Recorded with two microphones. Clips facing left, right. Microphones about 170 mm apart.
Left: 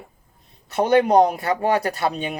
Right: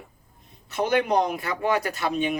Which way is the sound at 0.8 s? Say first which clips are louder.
Left 7 dB; 35° left (ahead or behind).